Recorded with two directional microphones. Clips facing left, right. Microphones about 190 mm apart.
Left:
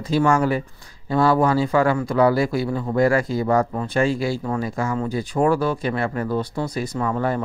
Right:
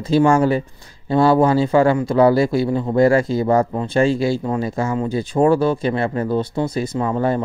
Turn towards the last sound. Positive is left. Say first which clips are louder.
# right 3 dB
turn(degrees=-25)  # may be behind; listen again after turning